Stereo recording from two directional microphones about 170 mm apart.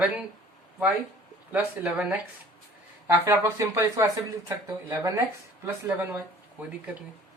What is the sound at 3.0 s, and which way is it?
Speech, 15° right (ahead or behind).